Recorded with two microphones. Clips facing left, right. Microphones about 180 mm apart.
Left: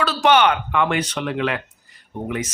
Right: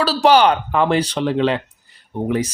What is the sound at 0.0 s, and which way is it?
Speech, 35° right (ahead or behind).